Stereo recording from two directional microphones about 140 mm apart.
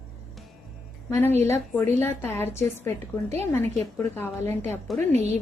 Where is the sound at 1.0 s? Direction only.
15° left (ahead or behind).